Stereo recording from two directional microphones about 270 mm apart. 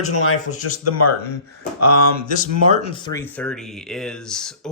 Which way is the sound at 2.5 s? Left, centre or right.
Right.